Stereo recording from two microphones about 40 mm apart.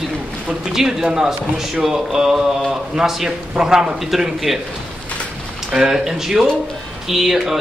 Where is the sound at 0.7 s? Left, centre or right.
Centre.